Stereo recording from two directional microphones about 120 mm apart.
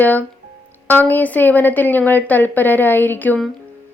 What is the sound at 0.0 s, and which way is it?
A woman's voice, 15° left (ahead or behind).